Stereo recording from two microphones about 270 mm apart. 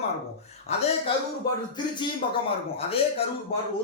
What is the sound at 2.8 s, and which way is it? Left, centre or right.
Speech, left.